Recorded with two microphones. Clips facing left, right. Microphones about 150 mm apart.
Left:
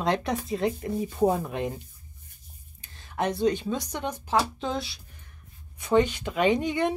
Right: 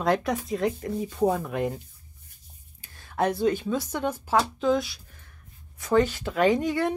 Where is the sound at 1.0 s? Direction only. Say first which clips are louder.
Even; 25° left (ahead or behind).